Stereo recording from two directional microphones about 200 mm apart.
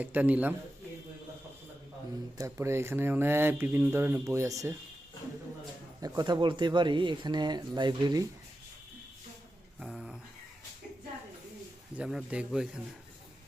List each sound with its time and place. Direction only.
0.0 s speech: 10° right (ahead or behind)
2.4 s speech: 15° right (ahead or behind)
6.0 s speech: 20° right (ahead or behind)
9.8 s a sound: centre (ahead or behind)
11.9 s speech: 5° right (ahead or behind)